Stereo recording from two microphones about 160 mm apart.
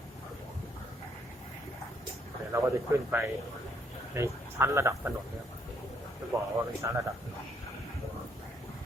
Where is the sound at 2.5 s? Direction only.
15° right (ahead or behind).